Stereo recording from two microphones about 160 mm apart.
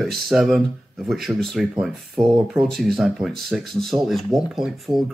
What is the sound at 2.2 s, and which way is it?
Speech, 30° right (ahead or behind).